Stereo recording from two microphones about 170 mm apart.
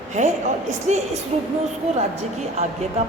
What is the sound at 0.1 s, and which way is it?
Speech, 45° right (ahead or behind).